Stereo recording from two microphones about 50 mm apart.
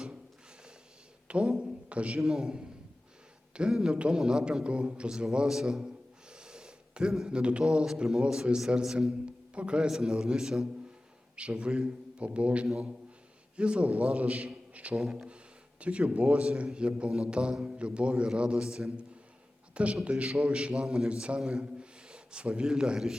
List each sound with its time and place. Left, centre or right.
1.3 s a sound: right
1.9 s a man's voice: right
2.2 s a man's voice: centre
3.7 s a man's voice: centre
3.9 s a man's voice: right
6.3 s a sound: centre
7.3 s a man's voice: right
9.2 s a sound: right
9.9 s a man's voice: centre
11.3 s a man's voice: right
19.7 s a man's voice: right